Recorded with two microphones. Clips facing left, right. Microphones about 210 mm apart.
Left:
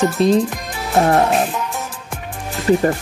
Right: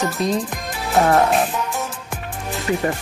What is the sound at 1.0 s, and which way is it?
Speech, 30° left (ahead or behind).